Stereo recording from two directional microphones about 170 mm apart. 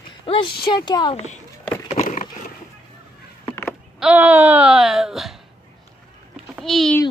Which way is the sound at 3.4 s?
15° left (ahead or behind).